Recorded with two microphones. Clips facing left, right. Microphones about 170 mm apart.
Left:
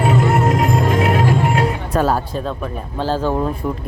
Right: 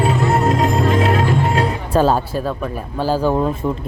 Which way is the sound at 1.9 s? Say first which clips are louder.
Right 4 dB; 30° right (ahead or behind).